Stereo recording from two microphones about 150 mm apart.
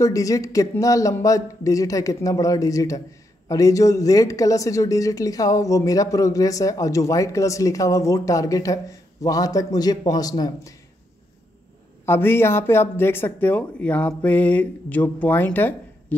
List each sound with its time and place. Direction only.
0.0 s speech: 20° left (ahead or behind)
12.1 s speech: 15° left (ahead or behind)